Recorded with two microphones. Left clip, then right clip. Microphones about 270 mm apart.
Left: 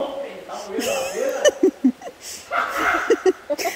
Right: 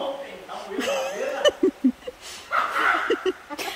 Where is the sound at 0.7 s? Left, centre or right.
Centre.